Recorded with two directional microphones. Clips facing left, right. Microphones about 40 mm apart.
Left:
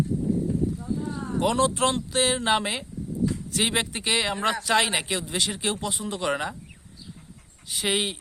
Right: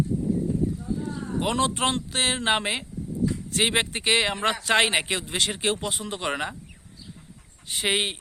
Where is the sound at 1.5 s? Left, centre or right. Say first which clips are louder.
Even; right.